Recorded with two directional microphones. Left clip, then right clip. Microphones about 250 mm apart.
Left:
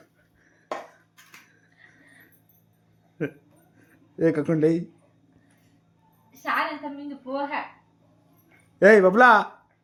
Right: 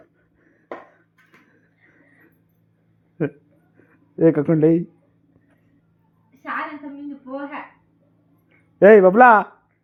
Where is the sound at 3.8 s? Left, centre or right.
Centre.